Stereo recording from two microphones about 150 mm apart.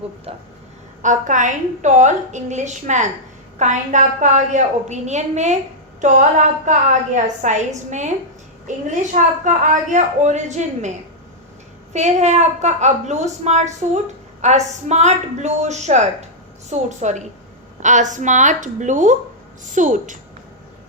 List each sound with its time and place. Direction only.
0.3 s a sound: 40° right (ahead or behind)
1.0 s a woman's voice: 55° right (ahead or behind)
6.7 s a woman's voice: 55° right (ahead or behind)
9.1 s a woman's voice: 55° right (ahead or behind)
11.9 s a woman's voice: 50° right (ahead or behind)